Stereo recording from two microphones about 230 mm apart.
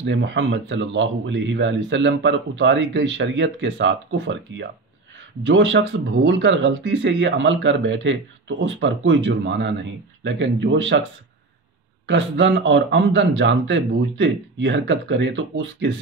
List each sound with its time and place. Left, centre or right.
0.0 s speech: right
12.1 s speech: right